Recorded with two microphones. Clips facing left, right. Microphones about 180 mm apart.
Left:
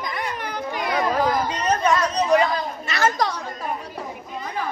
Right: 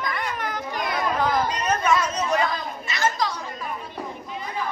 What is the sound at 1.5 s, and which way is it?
Speech, 35° left (ahead or behind).